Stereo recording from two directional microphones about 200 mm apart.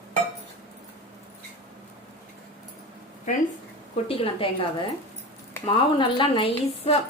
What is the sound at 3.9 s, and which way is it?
Speech, 30° left (ahead or behind).